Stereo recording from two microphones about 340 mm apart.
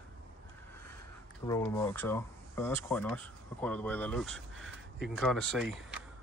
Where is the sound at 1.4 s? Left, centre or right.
Centre.